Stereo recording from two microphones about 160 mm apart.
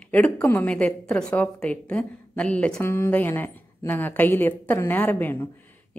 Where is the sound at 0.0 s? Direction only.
5° left (ahead or behind).